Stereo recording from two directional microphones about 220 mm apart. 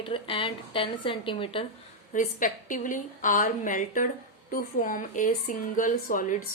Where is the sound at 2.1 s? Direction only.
35° left (ahead or behind).